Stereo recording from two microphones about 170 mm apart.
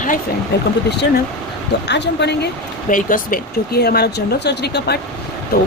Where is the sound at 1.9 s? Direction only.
85° left.